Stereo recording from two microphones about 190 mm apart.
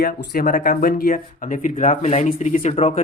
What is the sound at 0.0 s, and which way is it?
Speech, 45° left (ahead or behind).